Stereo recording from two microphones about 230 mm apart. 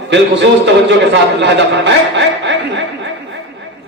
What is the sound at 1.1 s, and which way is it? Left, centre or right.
A man's voice, right.